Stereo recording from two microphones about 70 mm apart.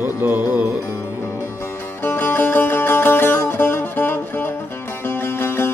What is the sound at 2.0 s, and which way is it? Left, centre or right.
Music, left.